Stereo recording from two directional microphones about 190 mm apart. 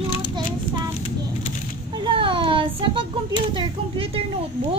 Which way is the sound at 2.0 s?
25° right (ahead or behind).